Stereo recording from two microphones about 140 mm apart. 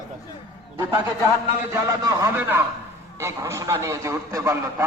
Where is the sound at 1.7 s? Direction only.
25° right (ahead or behind).